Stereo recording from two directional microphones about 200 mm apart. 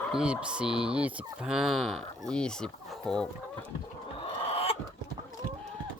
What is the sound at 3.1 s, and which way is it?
Livestock, centre (ahead or behind).